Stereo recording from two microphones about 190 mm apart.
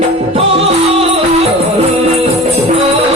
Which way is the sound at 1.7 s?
35° right (ahead or behind).